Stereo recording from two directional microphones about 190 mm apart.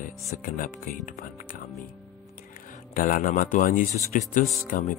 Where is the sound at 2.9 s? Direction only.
45° left (ahead or behind).